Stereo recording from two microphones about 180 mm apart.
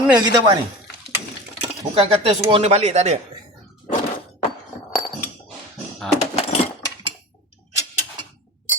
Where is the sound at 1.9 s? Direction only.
35° right (ahead or behind).